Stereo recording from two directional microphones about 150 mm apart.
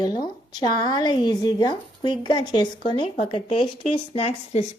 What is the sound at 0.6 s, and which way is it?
A woman's voice, 30° left (ahead or behind).